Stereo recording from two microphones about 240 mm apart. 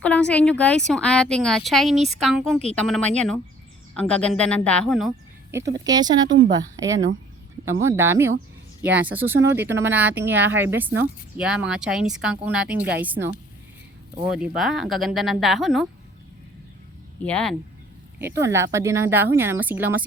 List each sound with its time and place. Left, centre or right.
0.0 s speech: centre
5.8 s speech: centre
14.3 s speech: centre
17.2 s speech: centre
18.2 s speech: centre